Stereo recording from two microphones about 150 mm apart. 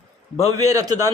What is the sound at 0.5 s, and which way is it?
Speech, 25° right (ahead or behind).